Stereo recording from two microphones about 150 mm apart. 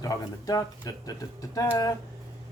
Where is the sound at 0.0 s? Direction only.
25° left (ahead or behind).